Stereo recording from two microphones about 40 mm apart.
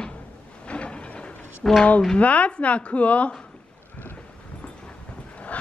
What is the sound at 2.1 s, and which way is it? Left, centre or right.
Speech, left.